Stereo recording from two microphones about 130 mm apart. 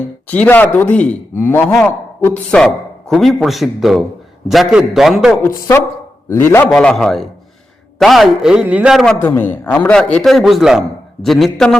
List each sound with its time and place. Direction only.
0.3 s a man's voice: 15° left (ahead or behind); by 5.4 s centre (ahead or behind)
5.4 s a woman's voice: 20° left (ahead or behind)
6.7 s a man's voice: 5° left (ahead or behind)
9.2 s a man's voice: 15° left (ahead or behind)